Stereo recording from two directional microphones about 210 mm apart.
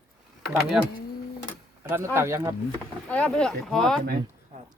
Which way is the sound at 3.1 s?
5° left (ahead or behind).